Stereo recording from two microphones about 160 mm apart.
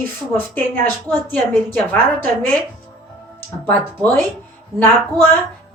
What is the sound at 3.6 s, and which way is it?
Speech, 10° left (ahead or behind).